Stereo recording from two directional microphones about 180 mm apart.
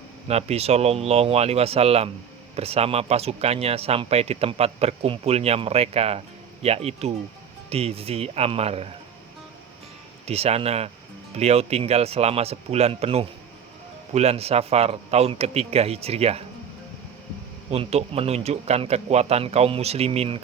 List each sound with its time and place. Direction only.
0.3 s speech: 35° right (ahead or behind)
10.2 s speech: 35° right (ahead or behind)
17.7 s speech: 35° right (ahead or behind)